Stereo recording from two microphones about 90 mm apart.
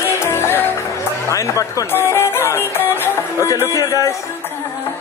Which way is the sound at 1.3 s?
35° left (ahead or behind).